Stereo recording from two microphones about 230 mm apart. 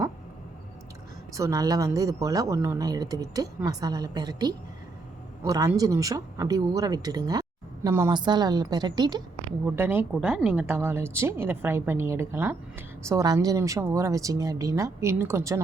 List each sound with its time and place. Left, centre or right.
1.3 s speech: centre